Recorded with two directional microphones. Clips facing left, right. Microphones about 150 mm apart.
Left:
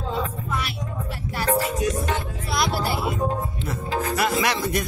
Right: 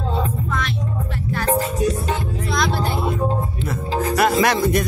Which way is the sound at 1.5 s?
35° right (ahead or behind).